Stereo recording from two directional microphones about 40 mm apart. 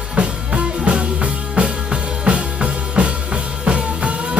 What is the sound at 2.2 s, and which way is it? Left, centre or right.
Music, right.